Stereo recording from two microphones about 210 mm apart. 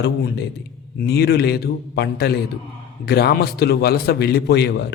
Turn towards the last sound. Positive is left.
turn(degrees=50)  # may be behind; listen again after turning